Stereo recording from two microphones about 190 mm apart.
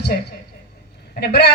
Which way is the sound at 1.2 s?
60° left (ahead or behind).